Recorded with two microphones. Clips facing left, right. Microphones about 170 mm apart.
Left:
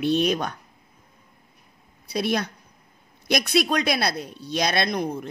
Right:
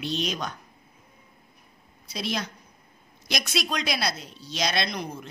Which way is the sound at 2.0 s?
55° left (ahead or behind).